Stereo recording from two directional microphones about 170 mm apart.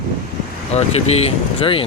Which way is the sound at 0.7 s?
35° left (ahead or behind).